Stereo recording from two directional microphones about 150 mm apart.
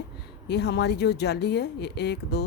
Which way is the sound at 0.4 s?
90° left.